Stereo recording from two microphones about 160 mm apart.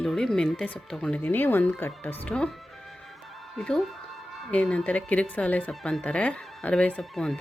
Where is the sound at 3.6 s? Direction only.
Centre (ahead or behind).